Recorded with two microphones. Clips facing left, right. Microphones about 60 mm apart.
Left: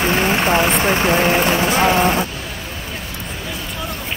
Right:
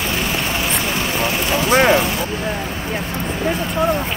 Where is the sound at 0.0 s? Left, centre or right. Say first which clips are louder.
Left 5 dB; left.